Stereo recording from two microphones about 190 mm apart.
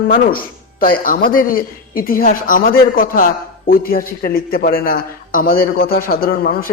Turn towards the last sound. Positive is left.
turn(degrees=50)  # may be behind; listen again after turning